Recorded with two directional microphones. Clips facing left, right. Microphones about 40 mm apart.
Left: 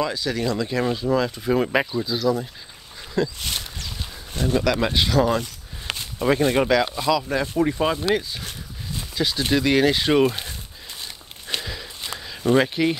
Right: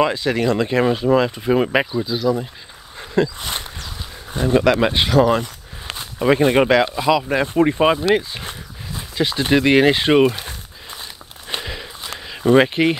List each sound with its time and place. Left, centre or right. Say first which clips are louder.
0.0 s speech: right 6 dB; right
6.4 s speech: right 5 dB; right
11.4 s a sound: right 2 dB; right
12.2 s speech: right 5 dB; right